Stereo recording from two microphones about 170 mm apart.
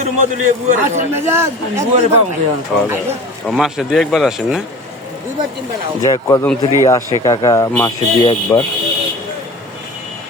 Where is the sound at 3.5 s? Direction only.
Centre (ahead or behind).